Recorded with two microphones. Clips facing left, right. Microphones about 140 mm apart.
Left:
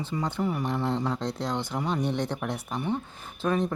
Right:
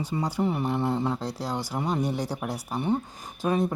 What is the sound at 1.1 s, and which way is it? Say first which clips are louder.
A man's voice: left 1 dB; 5° right (ahead or behind).